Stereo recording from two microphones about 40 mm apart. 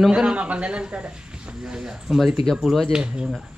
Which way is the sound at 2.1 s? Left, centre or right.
Centre.